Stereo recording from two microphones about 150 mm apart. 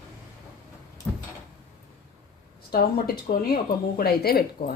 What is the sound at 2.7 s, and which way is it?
Speech, 90° left.